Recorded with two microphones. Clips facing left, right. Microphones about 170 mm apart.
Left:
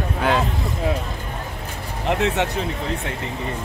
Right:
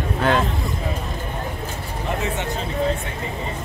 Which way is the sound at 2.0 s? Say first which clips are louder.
Left 5 dB; 70° left (ahead or behind).